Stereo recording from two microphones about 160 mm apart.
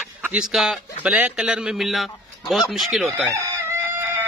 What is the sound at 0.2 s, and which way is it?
A man's voice, 5° right (ahead or behind).